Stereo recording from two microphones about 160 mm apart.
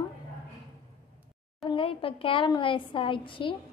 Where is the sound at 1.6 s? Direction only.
35° left (ahead or behind).